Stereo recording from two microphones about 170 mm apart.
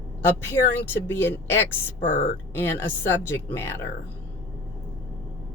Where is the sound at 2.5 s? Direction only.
15° left (ahead or behind).